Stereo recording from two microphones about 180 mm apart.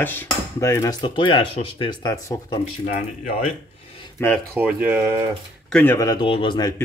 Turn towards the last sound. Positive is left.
turn(degrees=25)  # may be behind; listen again after turning